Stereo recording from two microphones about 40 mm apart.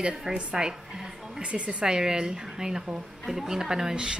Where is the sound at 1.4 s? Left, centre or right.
Right.